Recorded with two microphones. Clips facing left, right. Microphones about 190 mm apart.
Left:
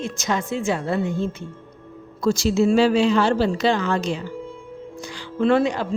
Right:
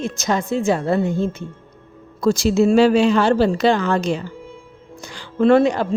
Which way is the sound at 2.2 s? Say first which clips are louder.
Right 3 dB; 50° right (ahead or behind).